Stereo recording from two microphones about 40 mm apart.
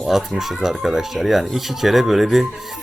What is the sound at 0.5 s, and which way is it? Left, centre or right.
Speech, centre.